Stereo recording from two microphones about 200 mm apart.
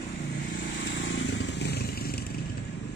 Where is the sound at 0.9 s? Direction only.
65° left (ahead or behind).